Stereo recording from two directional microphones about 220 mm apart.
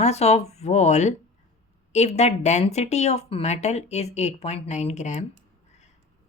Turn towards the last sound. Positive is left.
turn(degrees=30)  # may be behind; listen again after turning